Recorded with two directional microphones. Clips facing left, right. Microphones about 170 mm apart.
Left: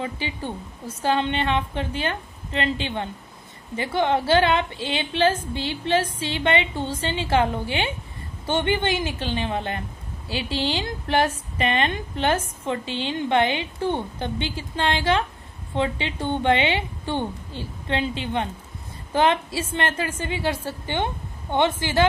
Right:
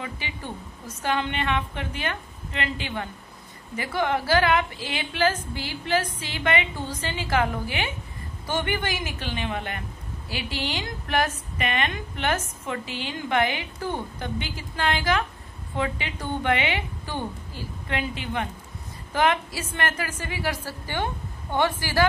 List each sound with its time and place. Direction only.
0.0 s a man's voice: 30° left (ahead or behind)